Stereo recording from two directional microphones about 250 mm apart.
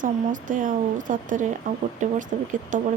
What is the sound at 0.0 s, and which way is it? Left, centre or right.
Speech, right.